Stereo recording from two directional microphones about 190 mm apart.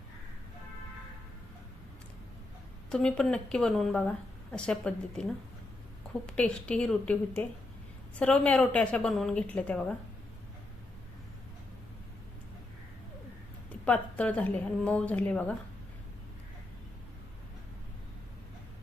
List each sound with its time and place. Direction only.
2.9 s a woman's voice: 5° left (ahead or behind)
6.2 s a woman's voice: 5° left (ahead or behind)
13.8 s a woman's voice: 10° left (ahead or behind)